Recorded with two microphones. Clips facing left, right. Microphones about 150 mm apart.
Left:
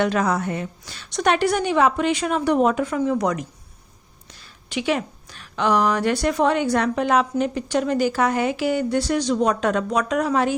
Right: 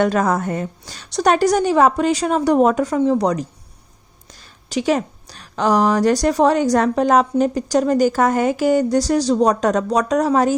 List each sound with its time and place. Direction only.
0.0 s speech: 45° right (ahead or behind)